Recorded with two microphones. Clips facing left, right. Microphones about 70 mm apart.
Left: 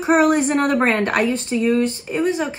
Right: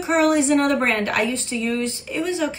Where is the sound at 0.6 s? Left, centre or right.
Left.